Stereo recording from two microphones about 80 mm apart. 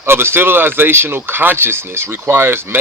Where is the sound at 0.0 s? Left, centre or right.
Right.